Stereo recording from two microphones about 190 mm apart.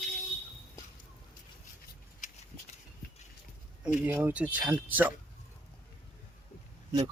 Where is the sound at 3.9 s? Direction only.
10° right (ahead or behind).